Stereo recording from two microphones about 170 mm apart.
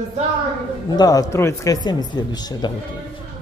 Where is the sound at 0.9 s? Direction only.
20° left (ahead or behind).